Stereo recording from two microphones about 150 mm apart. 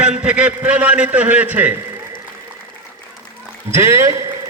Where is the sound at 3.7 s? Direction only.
20° right (ahead or behind).